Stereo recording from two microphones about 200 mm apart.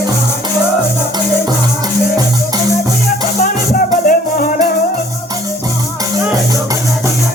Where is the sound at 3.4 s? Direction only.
45° left (ahead or behind).